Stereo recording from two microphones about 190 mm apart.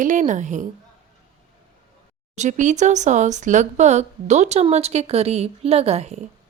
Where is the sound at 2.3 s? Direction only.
40° right (ahead or behind).